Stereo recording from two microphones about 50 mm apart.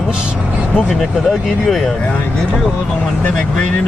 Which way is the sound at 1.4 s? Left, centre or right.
Centre.